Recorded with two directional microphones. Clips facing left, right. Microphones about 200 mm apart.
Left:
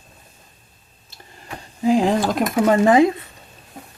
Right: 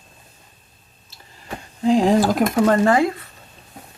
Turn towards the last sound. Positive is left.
turn(degrees=20)  # may be behind; listen again after turning